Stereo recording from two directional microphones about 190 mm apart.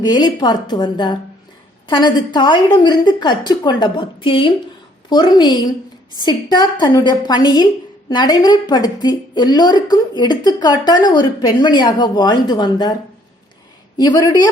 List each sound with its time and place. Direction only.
0.0 s a woman's voice: 20° left (ahead or behind)